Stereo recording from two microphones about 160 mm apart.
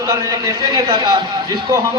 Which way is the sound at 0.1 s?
20° right (ahead or behind).